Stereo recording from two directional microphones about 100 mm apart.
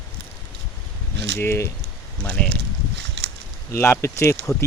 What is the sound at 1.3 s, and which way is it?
Speech, 25° left (ahead or behind).